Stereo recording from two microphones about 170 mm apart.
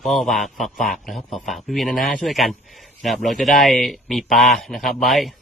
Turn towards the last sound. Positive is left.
turn(degrees=0)  # may be behind; listen again after turning